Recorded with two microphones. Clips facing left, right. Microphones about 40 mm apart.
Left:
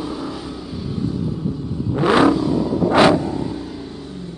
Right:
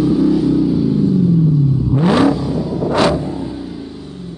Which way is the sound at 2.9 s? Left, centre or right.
Centre.